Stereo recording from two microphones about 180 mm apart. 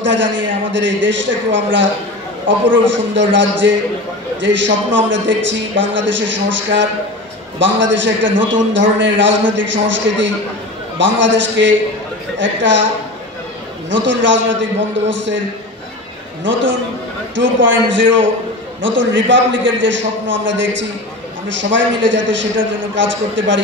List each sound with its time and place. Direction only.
0.0 s a man's voice: 90° right
11.0 s a man's voice: 90° right
13.8 s a man's voice: 90° right
17.4 s a man's voice: 90° right